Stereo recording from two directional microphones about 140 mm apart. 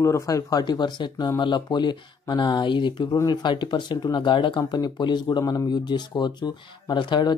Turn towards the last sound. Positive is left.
turn(degrees=35)  # may be behind; listen again after turning